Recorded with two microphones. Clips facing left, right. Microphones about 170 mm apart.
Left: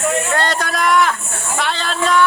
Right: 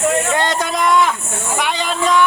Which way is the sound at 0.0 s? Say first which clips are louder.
Right 2 dB; 20° right (ahead or behind).